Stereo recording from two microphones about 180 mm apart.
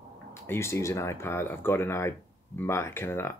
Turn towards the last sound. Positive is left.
turn(degrees=15)  # may be behind; listen again after turning